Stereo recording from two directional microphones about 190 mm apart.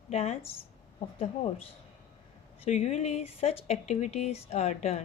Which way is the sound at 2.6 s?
35° left (ahead or behind).